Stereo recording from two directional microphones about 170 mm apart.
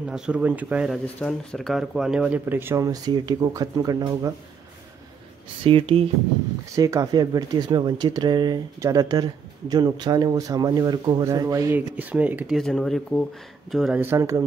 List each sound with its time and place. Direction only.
0.1 s speech: 5° right (ahead or behind)
1.0 s speech: 5° left (ahead or behind); by 4.3 s 25° right (ahead or behind)
5.6 s speech: 30° right (ahead or behind)
6.7 s speech: 20° right (ahead or behind); by 14.0 s centre (ahead or behind)
14.0 s speech: 15° right (ahead or behind)